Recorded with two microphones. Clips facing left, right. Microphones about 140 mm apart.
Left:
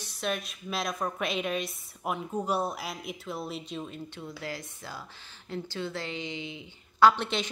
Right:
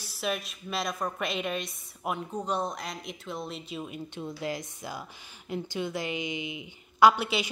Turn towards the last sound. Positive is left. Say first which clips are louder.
# right 1 dB
turn(degrees=-5)  # may be behind; listen again after turning